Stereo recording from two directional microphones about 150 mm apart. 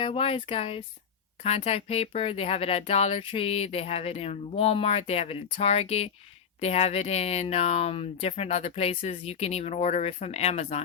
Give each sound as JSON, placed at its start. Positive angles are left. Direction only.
{"t": 0.0, "sound": "speech", "side_deg": 40}